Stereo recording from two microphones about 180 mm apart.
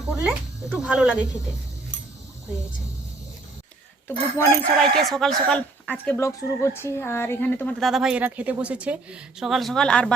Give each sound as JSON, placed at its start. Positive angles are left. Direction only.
{"t": 0.0, "sound": "speech", "side_deg": 0}
{"t": 4.4, "sound": "speech", "side_deg": 15}
{"t": 4.8, "sound": "speech", "side_deg": 0}